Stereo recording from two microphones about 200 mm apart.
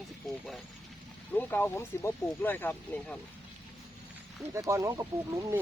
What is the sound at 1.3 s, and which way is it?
Speech, 10° left (ahead or behind).